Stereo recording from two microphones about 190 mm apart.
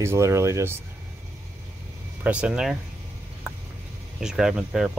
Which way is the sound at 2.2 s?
5° right (ahead or behind).